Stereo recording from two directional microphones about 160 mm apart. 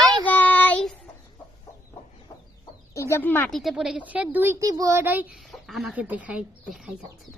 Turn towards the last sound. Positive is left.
turn(degrees=-10)  # may be behind; listen again after turning